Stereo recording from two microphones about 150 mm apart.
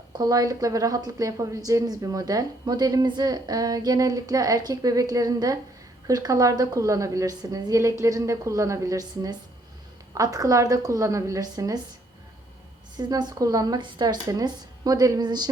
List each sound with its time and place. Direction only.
0.1 s a woman's voice: 25° right (ahead or behind)
13.0 s a woman's voice: 30° right (ahead or behind)